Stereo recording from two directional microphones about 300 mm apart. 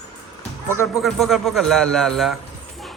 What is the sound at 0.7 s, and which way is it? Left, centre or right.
A man's voice, centre.